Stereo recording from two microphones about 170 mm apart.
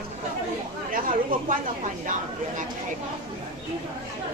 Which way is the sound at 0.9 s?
55° right (ahead or behind).